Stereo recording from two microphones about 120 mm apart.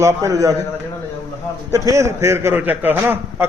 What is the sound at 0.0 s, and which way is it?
Speech, 25° right (ahead or behind).